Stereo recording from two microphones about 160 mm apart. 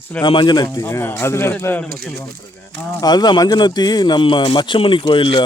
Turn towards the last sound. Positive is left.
turn(degrees=30)  # may be behind; listen again after turning